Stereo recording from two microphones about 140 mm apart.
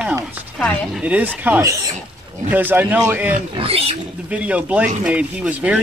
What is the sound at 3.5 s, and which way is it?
Speech, 45° right (ahead or behind).